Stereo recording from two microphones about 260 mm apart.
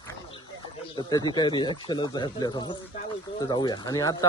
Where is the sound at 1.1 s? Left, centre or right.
Centre.